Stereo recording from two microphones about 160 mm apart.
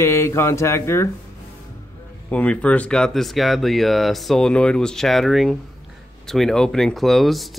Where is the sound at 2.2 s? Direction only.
10° left (ahead or behind).